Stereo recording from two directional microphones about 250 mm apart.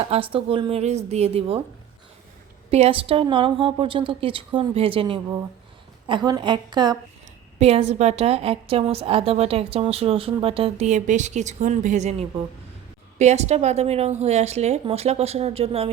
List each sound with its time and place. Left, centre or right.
0.0 s a woman's voice: right
2.6 s a woman's voice: right
13.1 s a woman's voice: right